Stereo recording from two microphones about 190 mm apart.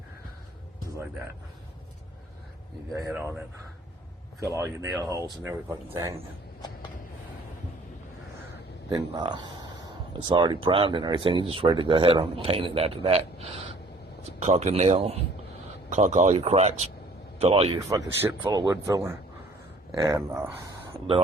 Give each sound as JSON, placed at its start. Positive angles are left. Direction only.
{"t": 2.9, "sound": "speech", "side_deg": -15}
{"t": 8.9, "sound": "speech", "side_deg": -25}
{"t": 17.8, "sound": "speech", "side_deg": -15}